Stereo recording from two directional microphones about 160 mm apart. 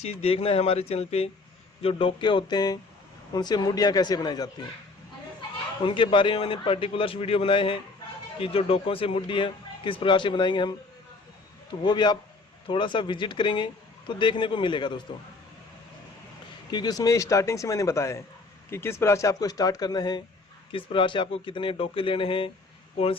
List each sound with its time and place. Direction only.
0.0 s speech: 40° left (ahead or behind); by 4.6 s 25° left (ahead or behind)
5.8 s speech: 30° left (ahead or behind)
11.8 s speech: 25° left (ahead or behind)
16.7 s speech: 25° left (ahead or behind)